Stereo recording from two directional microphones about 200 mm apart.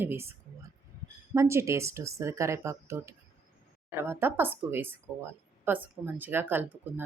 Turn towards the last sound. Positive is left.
turn(degrees=-10)  # may be behind; listen again after turning